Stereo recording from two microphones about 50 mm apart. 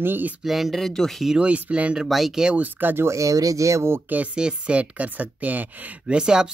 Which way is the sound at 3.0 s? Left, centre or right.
Right.